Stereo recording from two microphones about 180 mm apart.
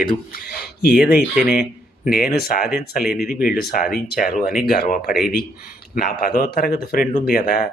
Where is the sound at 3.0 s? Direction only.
Centre (ahead or behind).